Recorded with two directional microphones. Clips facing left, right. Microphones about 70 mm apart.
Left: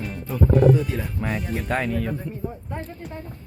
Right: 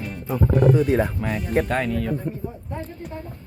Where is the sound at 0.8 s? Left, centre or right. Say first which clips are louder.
Right 9 dB; right.